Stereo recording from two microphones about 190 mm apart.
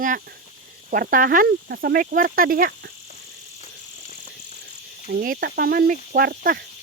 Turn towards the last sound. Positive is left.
turn(degrees=-50)  # may be behind; listen again after turning